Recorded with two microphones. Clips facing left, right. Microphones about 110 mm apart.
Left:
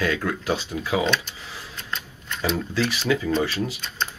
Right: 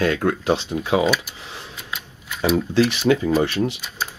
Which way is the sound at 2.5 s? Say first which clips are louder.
Right 7 dB; 5° right (ahead or behind).